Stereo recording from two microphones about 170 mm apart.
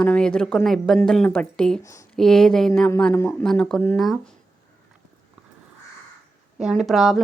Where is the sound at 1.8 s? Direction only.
20° left (ahead or behind).